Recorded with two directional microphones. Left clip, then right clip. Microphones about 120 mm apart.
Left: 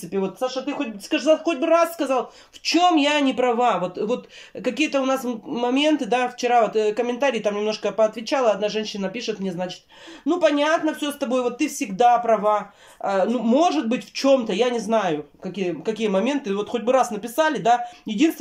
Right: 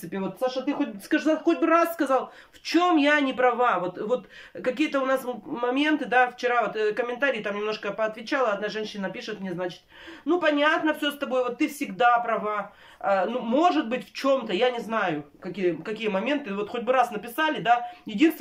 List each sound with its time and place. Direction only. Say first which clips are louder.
1.4 s speech: left 3 dB; 20° left (ahead or behind)